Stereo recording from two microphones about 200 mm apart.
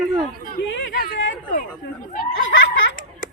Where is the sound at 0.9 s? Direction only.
45° left (ahead or behind).